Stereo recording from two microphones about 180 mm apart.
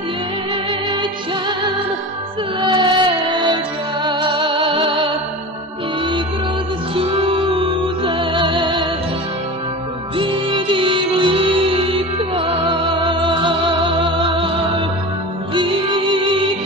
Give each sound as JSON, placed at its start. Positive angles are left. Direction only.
{"t": 2.6, "sound": "music", "side_deg": -25}
{"t": 7.0, "sound": "music", "side_deg": -30}
{"t": 10.1, "sound": "music", "side_deg": -30}
{"t": 15.5, "sound": "music", "side_deg": -30}